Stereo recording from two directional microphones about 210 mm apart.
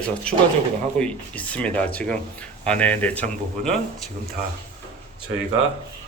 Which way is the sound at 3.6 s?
40° right (ahead or behind).